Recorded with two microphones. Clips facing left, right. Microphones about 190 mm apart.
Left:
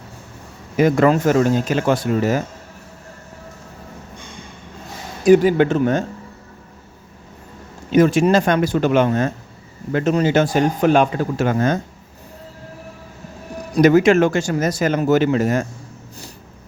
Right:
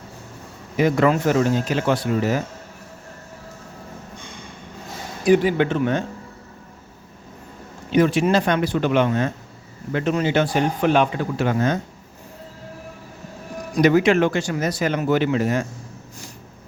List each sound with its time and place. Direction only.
0.8 s speech: 45° left (ahead or behind)
5.2 s speech: 45° left (ahead or behind)
7.9 s speech: 45° left (ahead or behind)
13.8 s speech: 45° left (ahead or behind)